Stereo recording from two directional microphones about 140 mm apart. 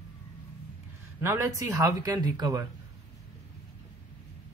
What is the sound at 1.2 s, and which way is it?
Speech, 15° right (ahead or behind).